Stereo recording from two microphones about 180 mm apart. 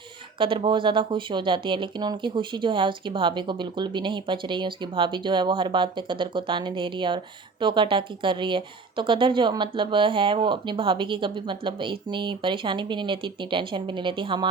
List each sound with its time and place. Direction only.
0.3 s a woman's voice: 30° right (ahead or behind)